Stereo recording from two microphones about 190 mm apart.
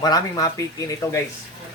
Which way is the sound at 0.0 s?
20° left (ahead or behind).